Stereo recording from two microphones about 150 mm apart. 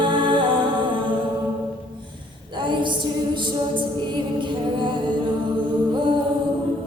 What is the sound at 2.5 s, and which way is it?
A capella, 30° right (ahead or behind).